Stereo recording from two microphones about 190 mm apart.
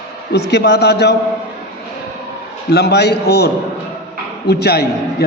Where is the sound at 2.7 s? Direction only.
60° left (ahead or behind).